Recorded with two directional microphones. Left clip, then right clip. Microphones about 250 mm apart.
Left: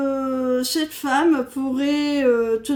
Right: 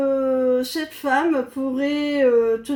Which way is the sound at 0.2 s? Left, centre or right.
Left.